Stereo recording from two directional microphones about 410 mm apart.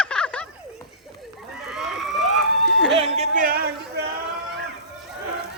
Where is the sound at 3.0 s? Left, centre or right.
Centre.